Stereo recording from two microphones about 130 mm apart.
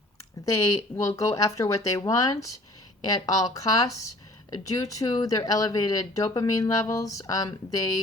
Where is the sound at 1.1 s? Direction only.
25° left (ahead or behind).